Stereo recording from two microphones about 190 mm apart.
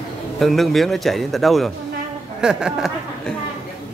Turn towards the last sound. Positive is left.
turn(degrees=0)  # may be behind; listen again after turning